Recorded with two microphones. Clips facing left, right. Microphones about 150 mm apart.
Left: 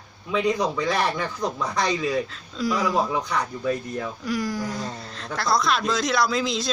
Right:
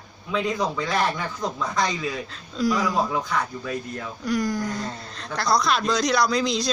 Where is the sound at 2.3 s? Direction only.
Centre (ahead or behind).